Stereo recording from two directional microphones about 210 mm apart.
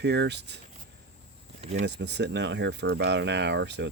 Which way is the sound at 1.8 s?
55° right (ahead or behind).